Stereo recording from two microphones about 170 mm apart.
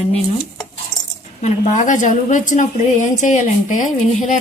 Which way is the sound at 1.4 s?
45° left (ahead or behind).